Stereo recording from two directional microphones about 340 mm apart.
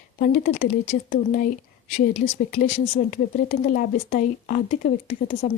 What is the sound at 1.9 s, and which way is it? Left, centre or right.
Speech, centre.